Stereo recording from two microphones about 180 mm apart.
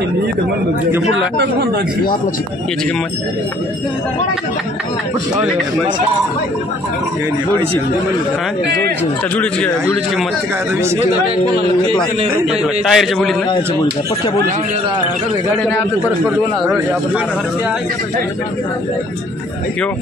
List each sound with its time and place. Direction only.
1.1 s speech: 75° right (ahead or behind)
9.4 s speech: 5° left (ahead or behind)
12.4 s a man's voice: centre (ahead or behind)